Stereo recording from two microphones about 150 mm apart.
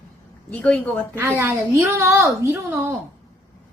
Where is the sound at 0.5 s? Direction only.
10° left (ahead or behind).